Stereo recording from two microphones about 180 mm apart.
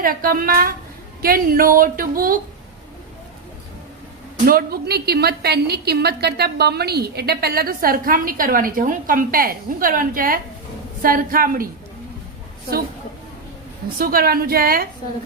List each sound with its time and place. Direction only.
0.0 s a woman's voice: 55° right (ahead or behind)
4.4 s a woman's voice: 55° right (ahead or behind)
14.0 s a woman's voice: 55° right (ahead or behind)